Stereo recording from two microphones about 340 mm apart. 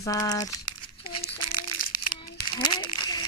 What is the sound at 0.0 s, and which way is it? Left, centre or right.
Speech, centre.